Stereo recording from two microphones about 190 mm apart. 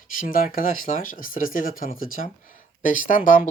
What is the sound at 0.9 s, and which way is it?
Speech, 45° left (ahead or behind).